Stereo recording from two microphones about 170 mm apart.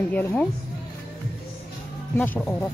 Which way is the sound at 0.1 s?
10° left (ahead or behind).